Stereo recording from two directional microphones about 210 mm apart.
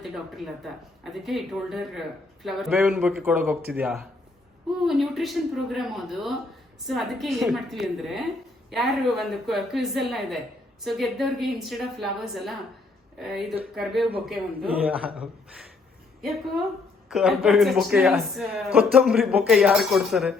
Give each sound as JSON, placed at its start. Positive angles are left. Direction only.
{"t": 0.0, "sound": "speech", "side_deg": 0}
{"t": 17.1, "sound": "speech", "side_deg": 0}